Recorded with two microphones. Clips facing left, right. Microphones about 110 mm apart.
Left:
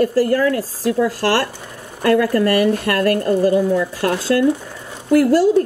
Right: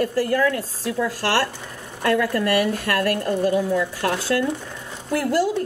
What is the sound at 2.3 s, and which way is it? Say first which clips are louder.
Speech: left 5 dB; 35° left (ahead or behind).